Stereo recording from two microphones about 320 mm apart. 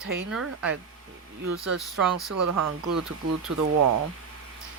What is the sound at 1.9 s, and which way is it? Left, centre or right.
Speech, centre.